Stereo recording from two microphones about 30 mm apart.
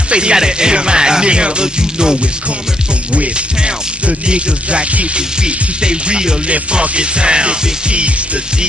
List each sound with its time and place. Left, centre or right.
0.1 s music: right
4.3 s music: right